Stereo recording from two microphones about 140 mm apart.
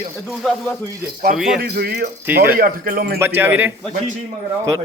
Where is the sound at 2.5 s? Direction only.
90° right.